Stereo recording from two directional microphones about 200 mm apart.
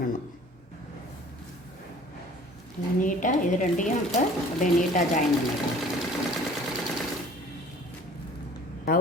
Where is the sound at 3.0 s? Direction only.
40° left (ahead or behind).